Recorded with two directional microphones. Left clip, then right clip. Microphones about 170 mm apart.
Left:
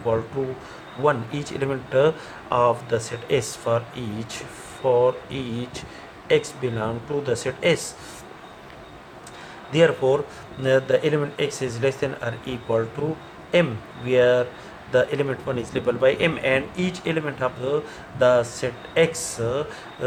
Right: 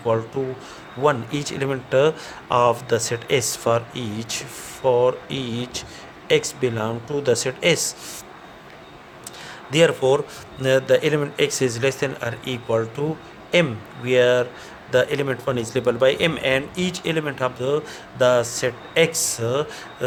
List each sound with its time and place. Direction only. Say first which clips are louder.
0.1 s speech: right 1 dB; 50° right (ahead or behind)
9.7 s speech: right 1 dB; 60° right (ahead or behind)